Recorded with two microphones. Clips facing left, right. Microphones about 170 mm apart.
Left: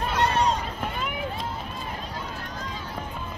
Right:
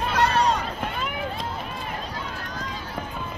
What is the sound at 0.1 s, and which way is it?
Run, 75° right (ahead or behind).